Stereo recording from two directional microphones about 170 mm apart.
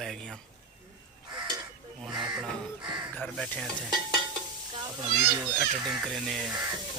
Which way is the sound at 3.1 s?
5° left (ahead or behind).